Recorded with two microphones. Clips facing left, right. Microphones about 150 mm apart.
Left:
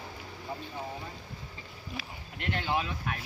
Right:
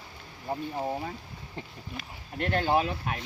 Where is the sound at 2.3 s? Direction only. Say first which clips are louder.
Right 6 dB; 40° right (ahead or behind).